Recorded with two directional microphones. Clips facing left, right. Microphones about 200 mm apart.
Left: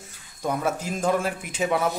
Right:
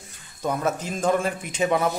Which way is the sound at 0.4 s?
10° left (ahead or behind).